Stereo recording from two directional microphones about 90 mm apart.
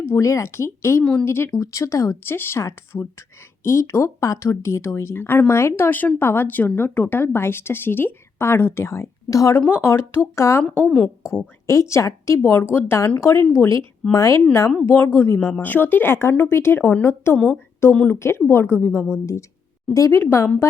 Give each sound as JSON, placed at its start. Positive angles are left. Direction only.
{"t": 0.0, "sound": "a woman's voice", "side_deg": 35}
{"t": 1.5, "sound": "a woman's voice", "side_deg": 35}
{"t": 9.6, "sound": "a woman's voice", "side_deg": 20}
{"t": 10.6, "sound": "a woman's voice", "side_deg": 10}
{"t": 11.6, "sound": "speech", "side_deg": 35}
{"t": 14.8, "sound": "a woman's voice", "side_deg": 25}
{"t": 18.2, "sound": "a woman's voice", "side_deg": 25}
{"t": 18.9, "sound": "a woman's voice", "side_deg": -5}
{"t": 19.2, "sound": "speech", "side_deg": 35}